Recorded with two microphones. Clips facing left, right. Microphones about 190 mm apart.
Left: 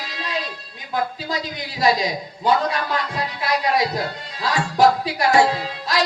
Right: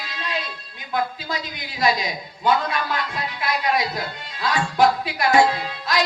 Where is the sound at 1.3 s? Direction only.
35° left (ahead or behind).